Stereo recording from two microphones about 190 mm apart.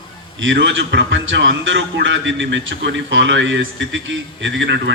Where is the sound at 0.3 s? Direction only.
80° right.